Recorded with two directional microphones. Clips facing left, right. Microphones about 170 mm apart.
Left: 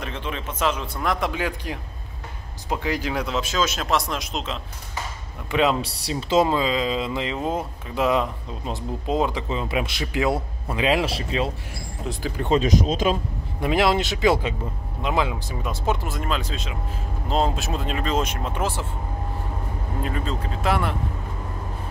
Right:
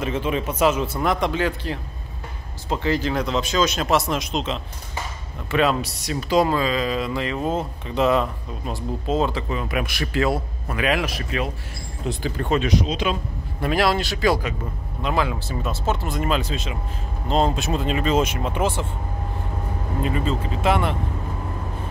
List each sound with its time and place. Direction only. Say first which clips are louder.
0.0 s speech: right 7 dB; 5° right (ahead or behind)
1.3 s speech: right 4 dB; 10° left (ahead or behind)
5.5 s speech: right 1 dB; 20° left (ahead or behind)
5.9 s speech: right 1 dB; 30° left (ahead or behind)
12.1 s speech: right 3 dB; 5° left (ahead or behind)
12.8 s speech: left 2 dB; 40° left (ahead or behind)
13.6 s speech: even; 20° left (ahead or behind)
16.2 s speech: right 4 dB; 5° right (ahead or behind)
20.0 s speech: right 4 dB; 5° right (ahead or behind)